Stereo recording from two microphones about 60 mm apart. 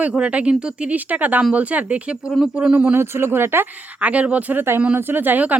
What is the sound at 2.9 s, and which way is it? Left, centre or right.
Speech, right.